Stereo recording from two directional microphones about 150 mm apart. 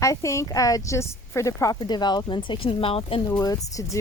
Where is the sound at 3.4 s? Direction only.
25° left (ahead or behind).